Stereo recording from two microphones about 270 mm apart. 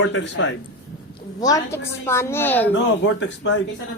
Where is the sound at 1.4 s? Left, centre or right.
Centre.